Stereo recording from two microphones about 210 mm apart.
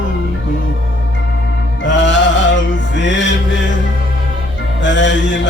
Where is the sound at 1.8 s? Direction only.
60° left (ahead or behind).